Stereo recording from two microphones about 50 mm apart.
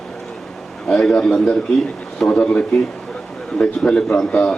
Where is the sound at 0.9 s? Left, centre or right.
Centre.